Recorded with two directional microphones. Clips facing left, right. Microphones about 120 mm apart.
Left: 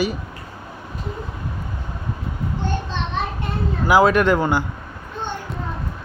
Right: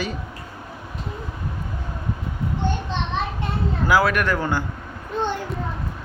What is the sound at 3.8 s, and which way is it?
Speech, 20° left (ahead or behind).